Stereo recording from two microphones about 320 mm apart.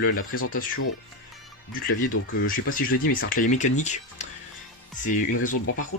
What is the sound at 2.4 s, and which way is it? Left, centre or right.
Speech, left.